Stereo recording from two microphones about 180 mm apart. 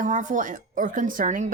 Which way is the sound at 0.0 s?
45° right (ahead or behind).